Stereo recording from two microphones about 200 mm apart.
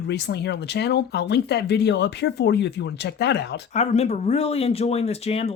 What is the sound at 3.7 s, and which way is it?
Speech, 35° left (ahead or behind).